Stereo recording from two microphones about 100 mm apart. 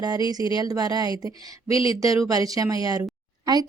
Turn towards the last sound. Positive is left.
turn(degrees=-40)  # may be behind; listen again after turning